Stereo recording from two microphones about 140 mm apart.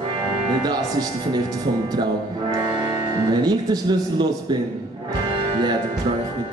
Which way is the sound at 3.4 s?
30° right (ahead or behind).